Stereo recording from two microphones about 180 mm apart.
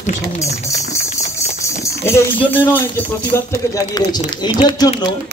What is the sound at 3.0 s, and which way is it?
A man's voice, 10° left (ahead or behind).